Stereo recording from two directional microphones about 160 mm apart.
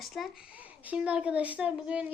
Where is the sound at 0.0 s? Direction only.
Centre (ahead or behind).